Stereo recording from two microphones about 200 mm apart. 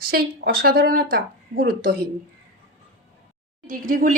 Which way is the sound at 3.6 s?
45° right (ahead or behind).